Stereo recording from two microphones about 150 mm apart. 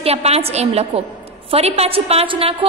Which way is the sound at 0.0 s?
45° right (ahead or behind).